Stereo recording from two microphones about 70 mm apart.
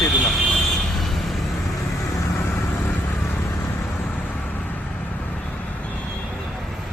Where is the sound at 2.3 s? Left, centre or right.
Left.